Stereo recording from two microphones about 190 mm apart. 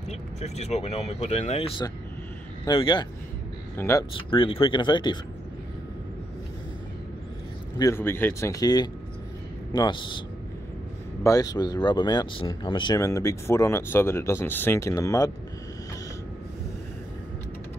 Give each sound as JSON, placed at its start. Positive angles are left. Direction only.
{"t": 0.4, "sound": "speech", "side_deg": 35}
{"t": 3.7, "sound": "speech", "side_deg": 15}
{"t": 4.3, "sound": "speech", "side_deg": 30}
{"t": 7.8, "sound": "speech", "side_deg": 10}
{"t": 11.2, "sound": "speech", "side_deg": 20}